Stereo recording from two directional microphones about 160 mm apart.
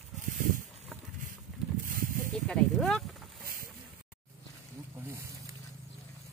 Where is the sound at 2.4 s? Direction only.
Centre (ahead or behind).